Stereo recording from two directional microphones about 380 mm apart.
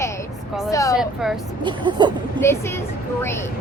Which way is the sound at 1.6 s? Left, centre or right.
Centre.